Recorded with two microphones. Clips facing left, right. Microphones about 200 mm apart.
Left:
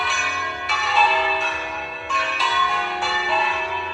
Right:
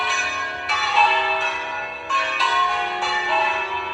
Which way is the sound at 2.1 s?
Centre (ahead or behind).